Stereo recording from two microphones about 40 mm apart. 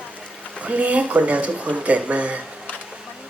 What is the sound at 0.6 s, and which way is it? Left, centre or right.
Speech, right.